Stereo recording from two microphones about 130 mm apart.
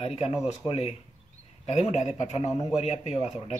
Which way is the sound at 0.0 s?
50° left (ahead or behind).